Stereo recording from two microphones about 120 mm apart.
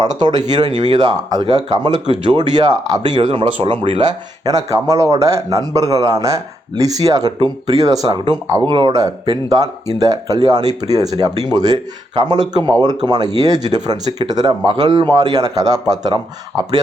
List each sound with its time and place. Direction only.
0.0 s speech: 35° right (ahead or behind)
4.4 s a man's voice: 25° right (ahead or behind)